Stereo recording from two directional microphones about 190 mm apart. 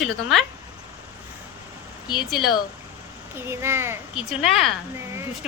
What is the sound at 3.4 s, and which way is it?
A woman's voice, 15° right (ahead or behind).